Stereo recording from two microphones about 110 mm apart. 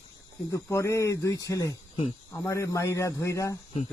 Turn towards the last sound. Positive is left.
turn(degrees=30)  # may be behind; listen again after turning